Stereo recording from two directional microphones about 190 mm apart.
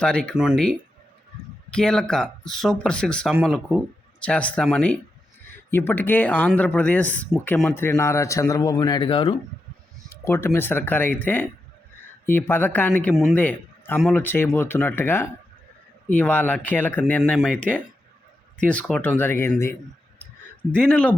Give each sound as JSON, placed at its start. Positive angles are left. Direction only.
{"t": 0.0, "sound": "speech", "side_deg": 5}
{"t": 10.1, "sound": "a man's voice", "side_deg": 15}
{"t": 20.1, "sound": "a sound", "side_deg": 5}